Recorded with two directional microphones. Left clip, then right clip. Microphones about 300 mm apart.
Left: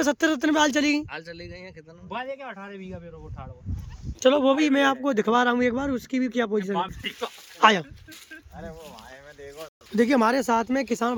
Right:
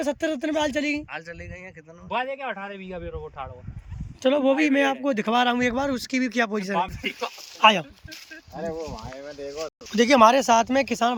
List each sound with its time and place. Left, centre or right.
0.0 s speech: centre
2.0 s a man's voice: right
4.2 s a man's voice: centre
6.7 s a man's voice: right
7.6 s a man's voice: centre
9.9 s a man's voice: centre